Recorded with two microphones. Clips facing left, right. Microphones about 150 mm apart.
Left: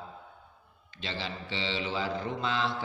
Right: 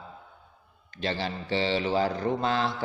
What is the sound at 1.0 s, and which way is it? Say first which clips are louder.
Speech: right 7 dB; 45° right (ahead or behind).